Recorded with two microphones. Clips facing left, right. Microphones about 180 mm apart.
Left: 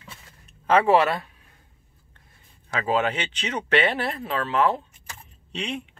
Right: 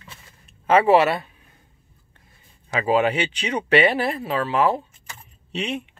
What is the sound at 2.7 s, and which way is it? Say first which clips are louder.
Speech: right 4 dB; 10° right (ahead or behind).